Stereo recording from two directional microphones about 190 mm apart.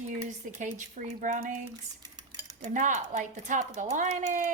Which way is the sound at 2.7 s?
40° right (ahead or behind).